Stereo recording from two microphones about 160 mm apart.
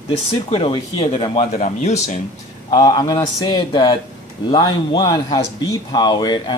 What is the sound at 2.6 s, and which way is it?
Speech, 25° left (ahead or behind).